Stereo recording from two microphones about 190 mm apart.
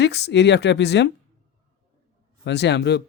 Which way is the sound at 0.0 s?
60° left (ahead or behind).